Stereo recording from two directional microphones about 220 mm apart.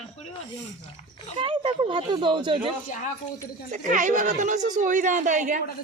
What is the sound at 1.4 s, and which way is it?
Speech, 25° right (ahead or behind).